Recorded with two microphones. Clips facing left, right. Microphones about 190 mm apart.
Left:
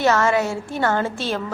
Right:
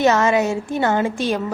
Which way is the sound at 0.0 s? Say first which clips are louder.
Right 2 dB; 20° right (ahead or behind).